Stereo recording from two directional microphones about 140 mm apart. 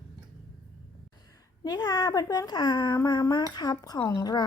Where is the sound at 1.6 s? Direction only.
30° left (ahead or behind).